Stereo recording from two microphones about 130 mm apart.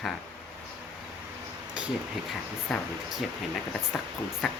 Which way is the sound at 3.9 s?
5° left (ahead or behind).